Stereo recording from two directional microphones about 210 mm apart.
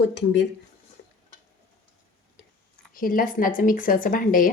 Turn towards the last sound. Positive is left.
turn(degrees=40)  # may be behind; listen again after turning